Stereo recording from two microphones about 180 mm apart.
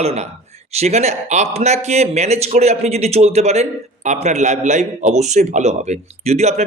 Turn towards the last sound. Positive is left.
turn(degrees=-40)  # may be behind; listen again after turning